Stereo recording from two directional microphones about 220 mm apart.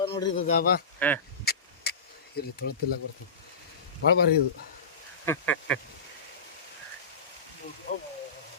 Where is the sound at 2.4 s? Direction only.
45° left (ahead or behind).